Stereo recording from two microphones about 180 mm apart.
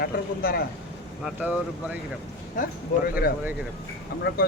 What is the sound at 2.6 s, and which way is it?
Speech, 50° left (ahead or behind).